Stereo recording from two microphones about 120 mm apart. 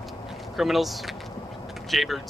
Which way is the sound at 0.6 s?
Centre (ahead or behind).